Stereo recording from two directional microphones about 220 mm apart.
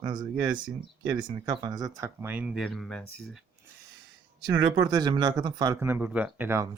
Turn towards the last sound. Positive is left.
turn(degrees=-10)  # may be behind; listen again after turning